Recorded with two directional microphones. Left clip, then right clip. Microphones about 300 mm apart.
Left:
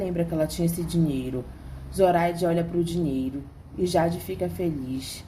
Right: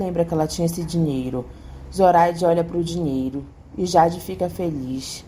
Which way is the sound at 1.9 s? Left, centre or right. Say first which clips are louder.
Right 6 dB; centre.